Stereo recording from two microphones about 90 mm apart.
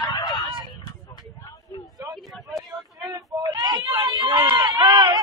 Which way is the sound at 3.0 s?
45° right (ahead or behind).